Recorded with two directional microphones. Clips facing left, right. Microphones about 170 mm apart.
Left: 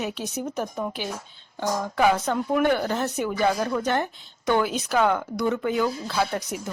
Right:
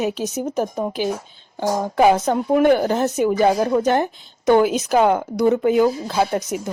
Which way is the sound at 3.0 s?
20° right (ahead or behind).